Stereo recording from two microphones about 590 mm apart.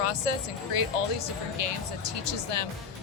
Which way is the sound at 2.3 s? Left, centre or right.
Left.